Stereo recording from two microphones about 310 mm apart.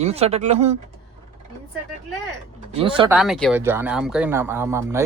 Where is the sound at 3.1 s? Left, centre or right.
Centre.